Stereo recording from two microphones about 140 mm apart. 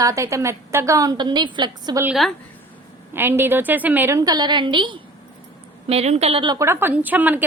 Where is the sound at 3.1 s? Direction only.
15° right (ahead or behind); by 5.0 s 35° right (ahead or behind).